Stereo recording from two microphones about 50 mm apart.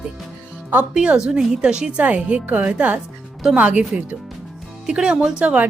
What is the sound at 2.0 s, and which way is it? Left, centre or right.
A woman's voice, right.